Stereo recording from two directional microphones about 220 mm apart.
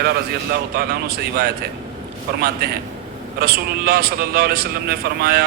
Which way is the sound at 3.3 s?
45° right (ahead or behind).